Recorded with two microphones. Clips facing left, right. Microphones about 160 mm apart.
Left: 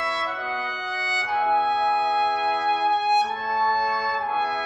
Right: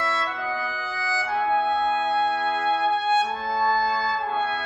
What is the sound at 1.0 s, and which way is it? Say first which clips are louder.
Music: even; 20° left (ahead or behind).